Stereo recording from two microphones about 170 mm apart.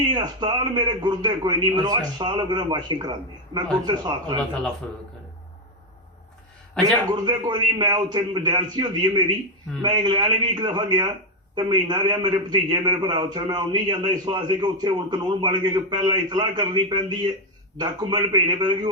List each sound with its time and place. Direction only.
0.1 s a man's voice: 25° right (ahead or behind)
6.8 s a man's voice: 5° left (ahead or behind)
7.1 s a man's voice: 25° right (ahead or behind)